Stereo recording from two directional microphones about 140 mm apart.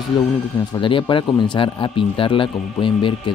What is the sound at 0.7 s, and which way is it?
Speech, 35° left (ahead or behind).